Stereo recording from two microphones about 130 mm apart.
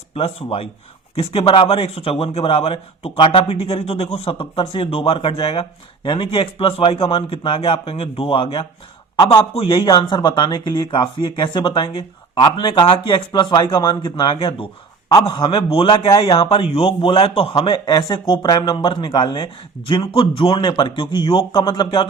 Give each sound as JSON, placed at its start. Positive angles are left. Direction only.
{"t": 1.1, "sound": "speech", "side_deg": 45}
{"t": 9.1, "sound": "a man's voice", "side_deg": 30}
{"t": 9.4, "sound": "speech", "side_deg": 45}